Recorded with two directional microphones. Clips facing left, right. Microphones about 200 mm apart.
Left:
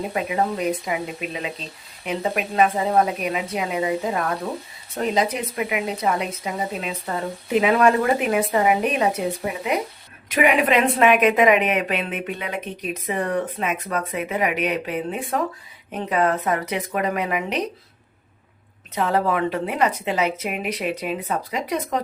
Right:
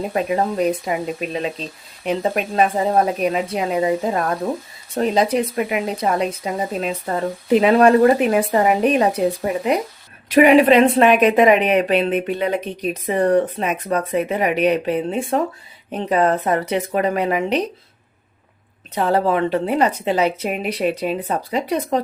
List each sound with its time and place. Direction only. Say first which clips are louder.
0.1 s a woman's voice: right 4 dB; 40° right (ahead or behind)
18.9 s a woman's voice: right 3 dB; 30° right (ahead or behind)